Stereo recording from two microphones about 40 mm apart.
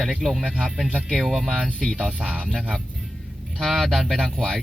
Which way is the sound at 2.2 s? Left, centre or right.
Right.